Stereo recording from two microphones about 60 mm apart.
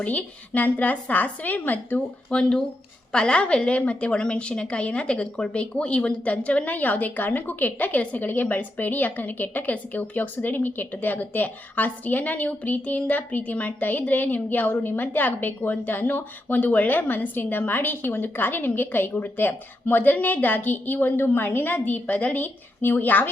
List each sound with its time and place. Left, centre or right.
0.0 s a woman's voice: left
2.3 s a woman's voice: centre; by 23.3 s left